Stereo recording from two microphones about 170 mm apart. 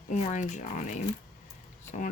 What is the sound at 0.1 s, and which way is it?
Speech, 45° left (ahead or behind).